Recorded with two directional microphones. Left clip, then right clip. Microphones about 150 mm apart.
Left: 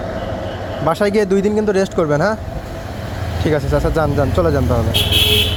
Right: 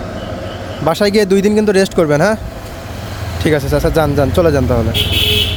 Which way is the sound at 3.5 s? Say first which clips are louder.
Right 3 dB; 45° right (ahead or behind).